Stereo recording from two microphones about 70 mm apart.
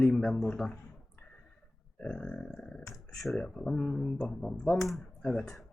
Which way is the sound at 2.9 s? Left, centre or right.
Centre.